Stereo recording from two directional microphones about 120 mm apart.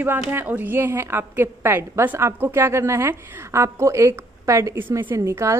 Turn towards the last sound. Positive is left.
turn(degrees=-25)  # may be behind; listen again after turning